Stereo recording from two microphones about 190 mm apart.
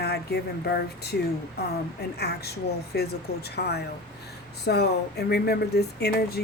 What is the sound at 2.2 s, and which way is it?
Speech, 60° left (ahead or behind).